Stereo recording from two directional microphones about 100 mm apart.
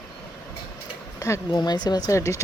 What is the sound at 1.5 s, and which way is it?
Speech, 45° left (ahead or behind).